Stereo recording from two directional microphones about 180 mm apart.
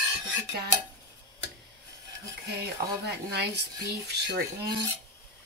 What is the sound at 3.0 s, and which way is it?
Speech, 65° right (ahead or behind).